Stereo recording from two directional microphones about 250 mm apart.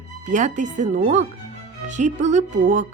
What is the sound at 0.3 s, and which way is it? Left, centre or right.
Speech, right.